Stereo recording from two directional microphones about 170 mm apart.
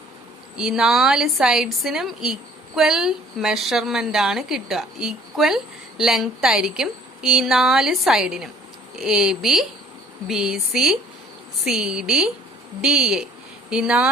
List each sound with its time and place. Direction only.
0.5 s a woman's voice: 5° right (ahead or behind)